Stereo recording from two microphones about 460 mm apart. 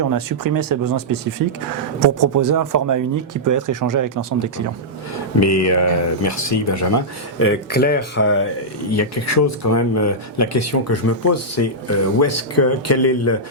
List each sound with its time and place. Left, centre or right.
0.0 s speech: right
5.4 s speech: left